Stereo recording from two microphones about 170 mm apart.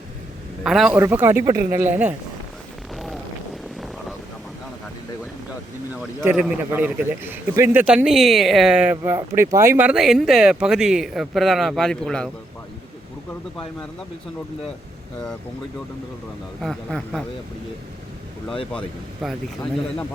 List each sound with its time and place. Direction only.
0.6 s a man's voice: centre (ahead or behind)
0.9 s speech: 15° right (ahead or behind)
2.9 s vehicle: centre (ahead or behind)
6.2 s a man's voice: 5° right (ahead or behind)
16.6 s a man's voice: centre (ahead or behind)
19.2 s a man's voice: centre (ahead or behind)